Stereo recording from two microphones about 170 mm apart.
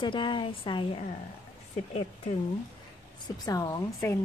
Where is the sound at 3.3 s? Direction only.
20° left (ahead or behind).